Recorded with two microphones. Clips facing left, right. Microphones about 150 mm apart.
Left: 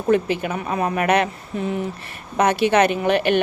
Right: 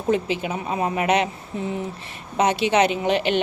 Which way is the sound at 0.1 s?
55° left (ahead or behind).